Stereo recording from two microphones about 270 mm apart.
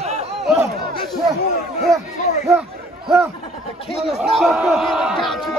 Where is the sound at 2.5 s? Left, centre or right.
Centre.